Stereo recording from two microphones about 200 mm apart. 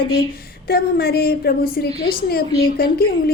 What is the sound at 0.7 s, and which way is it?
Speech, 50° left (ahead or behind).